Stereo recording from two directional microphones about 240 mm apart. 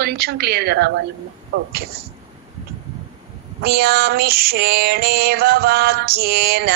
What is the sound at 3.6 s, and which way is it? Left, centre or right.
Female singing, right.